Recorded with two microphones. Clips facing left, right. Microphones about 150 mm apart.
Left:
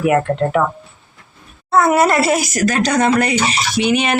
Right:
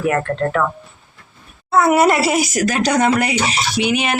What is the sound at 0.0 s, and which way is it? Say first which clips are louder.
Speech: left 3 dB; 15° left (ahead or behind).